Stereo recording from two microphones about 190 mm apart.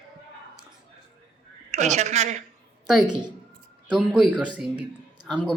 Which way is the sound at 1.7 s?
35° right (ahead or behind).